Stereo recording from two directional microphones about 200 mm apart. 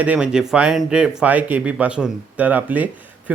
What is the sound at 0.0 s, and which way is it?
Speech, 5° right (ahead or behind).